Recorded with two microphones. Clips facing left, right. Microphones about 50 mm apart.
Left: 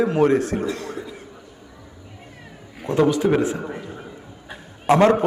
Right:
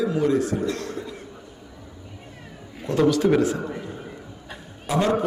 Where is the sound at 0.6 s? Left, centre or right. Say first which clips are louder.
Even; centre.